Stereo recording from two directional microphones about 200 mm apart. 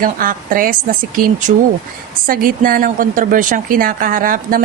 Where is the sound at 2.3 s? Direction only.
45° right (ahead or behind).